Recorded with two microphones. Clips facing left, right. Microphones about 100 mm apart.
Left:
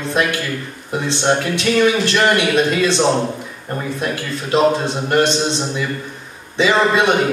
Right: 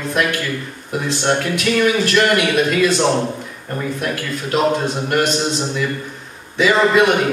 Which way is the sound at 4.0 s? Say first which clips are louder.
Even; 25° left (ahead or behind).